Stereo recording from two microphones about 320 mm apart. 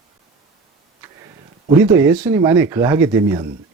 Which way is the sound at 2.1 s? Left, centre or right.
Centre.